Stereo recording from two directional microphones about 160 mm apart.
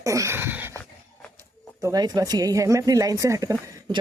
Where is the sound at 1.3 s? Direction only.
20° right (ahead or behind).